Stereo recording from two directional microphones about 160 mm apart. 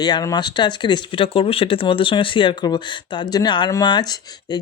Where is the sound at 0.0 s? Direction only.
25° left (ahead or behind).